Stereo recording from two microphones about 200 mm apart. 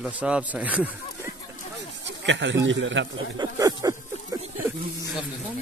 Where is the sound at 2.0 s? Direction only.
60° right (ahead or behind).